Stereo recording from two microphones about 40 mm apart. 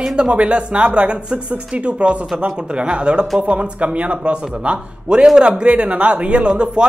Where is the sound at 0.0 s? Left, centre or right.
Centre.